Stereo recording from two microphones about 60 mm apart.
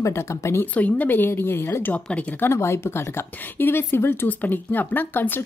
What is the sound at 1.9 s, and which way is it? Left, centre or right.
Speech, left.